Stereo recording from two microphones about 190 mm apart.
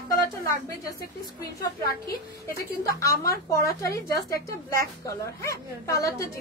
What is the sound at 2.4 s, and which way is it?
A woman's voice, 15° left (ahead or behind).